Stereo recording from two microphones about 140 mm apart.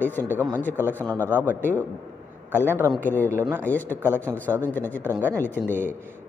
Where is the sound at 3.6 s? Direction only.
10° left (ahead or behind).